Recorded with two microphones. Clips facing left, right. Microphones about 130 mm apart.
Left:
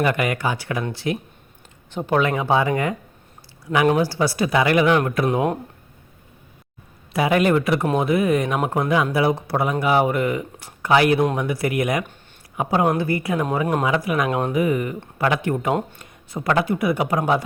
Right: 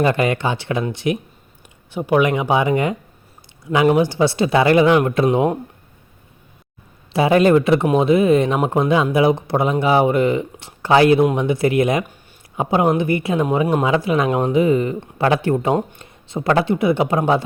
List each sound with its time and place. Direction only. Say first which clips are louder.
0.0 s speech: right 4 dB; 30° right (ahead or behind)
7.1 s speech: right 5 dB; 30° right (ahead or behind)